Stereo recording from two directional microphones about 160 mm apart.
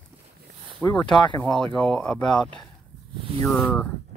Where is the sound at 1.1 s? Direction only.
30° left (ahead or behind).